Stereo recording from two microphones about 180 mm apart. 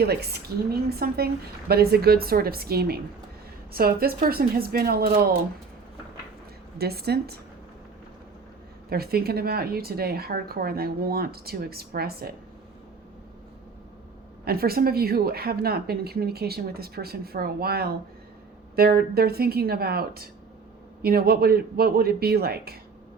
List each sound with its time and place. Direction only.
0.0 s a woman's voice: 65° right (ahead or behind)
6.7 s a woman's voice: 60° right (ahead or behind)
8.9 s a woman's voice: 60° right (ahead or behind)
14.4 s a woman's voice: 60° right (ahead or behind)